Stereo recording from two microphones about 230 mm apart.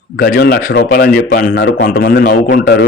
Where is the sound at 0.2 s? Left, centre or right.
Left.